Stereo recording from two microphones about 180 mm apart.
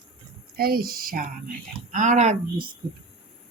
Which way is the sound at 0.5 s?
55° right (ahead or behind).